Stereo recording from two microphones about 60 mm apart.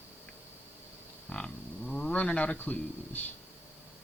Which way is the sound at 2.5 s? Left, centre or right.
Left.